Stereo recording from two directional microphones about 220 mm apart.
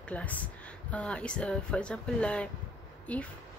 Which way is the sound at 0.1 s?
5° left (ahead or behind).